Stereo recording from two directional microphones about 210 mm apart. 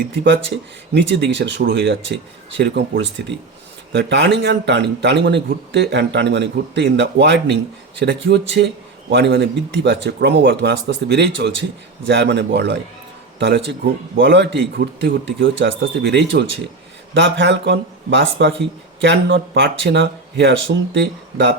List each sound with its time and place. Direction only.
0.9 s a man's voice: 60° right (ahead or behind)